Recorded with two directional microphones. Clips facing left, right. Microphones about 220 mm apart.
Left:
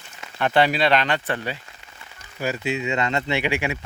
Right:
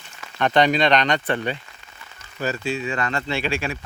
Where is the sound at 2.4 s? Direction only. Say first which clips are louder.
Even; 15° left (ahead or behind).